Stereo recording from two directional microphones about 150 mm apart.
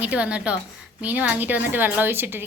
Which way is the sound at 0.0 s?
10° right (ahead or behind).